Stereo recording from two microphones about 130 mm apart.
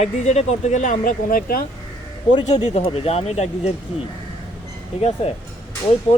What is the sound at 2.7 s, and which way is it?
Speech, 50° left (ahead or behind).